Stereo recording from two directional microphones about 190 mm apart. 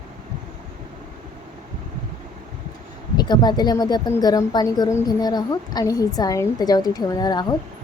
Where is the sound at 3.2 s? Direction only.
20° left (ahead or behind).